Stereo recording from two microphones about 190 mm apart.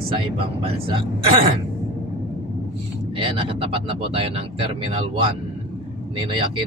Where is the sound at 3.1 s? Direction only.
30° right (ahead or behind).